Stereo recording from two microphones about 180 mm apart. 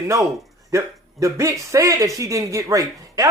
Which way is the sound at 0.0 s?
15° right (ahead or behind).